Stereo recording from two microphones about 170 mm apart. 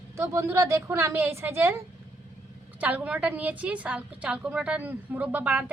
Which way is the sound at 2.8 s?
10° right (ahead or behind).